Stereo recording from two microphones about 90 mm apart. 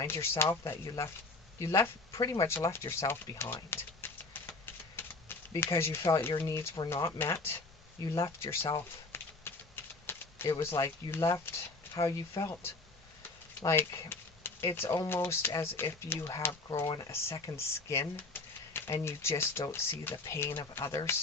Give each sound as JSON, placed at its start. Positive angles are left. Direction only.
{"t": 0.0, "sound": "speech", "side_deg": 30}
{"t": 2.6, "sound": "typewriter", "side_deg": 30}
{"t": 5.7, "sound": "speech", "side_deg": 30}
{"t": 9.1, "sound": "a sound", "side_deg": 25}
{"t": 10.6, "sound": "speech", "side_deg": 30}
{"t": 13.7, "sound": "speech", "side_deg": 25}
{"t": 16.8, "sound": "speech", "side_deg": 45}
{"t": 17.1, "sound": "speech", "side_deg": 35}
{"t": 18.3, "sound": "a sound", "side_deg": 25}
{"t": 19.0, "sound": "speech", "side_deg": 30}